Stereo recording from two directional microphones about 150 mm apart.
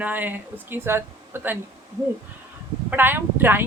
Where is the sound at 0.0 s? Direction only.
10° right (ahead or behind).